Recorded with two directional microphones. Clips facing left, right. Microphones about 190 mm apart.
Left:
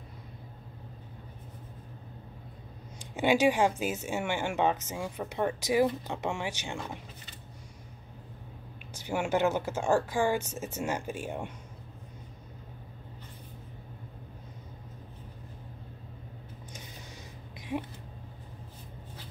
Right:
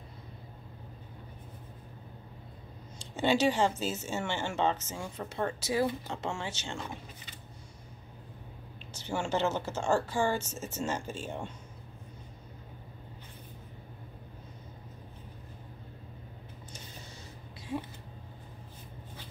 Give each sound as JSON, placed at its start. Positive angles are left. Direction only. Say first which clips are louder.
{"t": 3.0, "sound": "speech", "louder": "left 2 dB", "side_deg": 15}
{"t": 8.9, "sound": "speech", "louder": "left 3 dB", "side_deg": 15}
{"t": 17.6, "sound": "a sound", "louder": "left 2 dB", "side_deg": 15}